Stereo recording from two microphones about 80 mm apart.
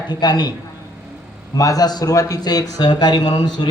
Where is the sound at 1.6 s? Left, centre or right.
Left.